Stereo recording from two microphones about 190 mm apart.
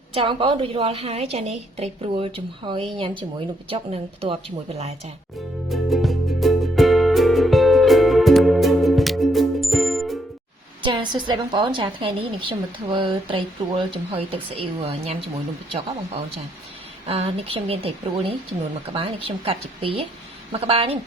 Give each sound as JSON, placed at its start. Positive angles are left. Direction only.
{"t": 0.1, "sound": "speech", "side_deg": -30}
{"t": 5.6, "sound": "music", "side_deg": 0}
{"t": 10.8, "sound": "speech", "side_deg": -25}
{"t": 17.1, "sound": "speech", "side_deg": -30}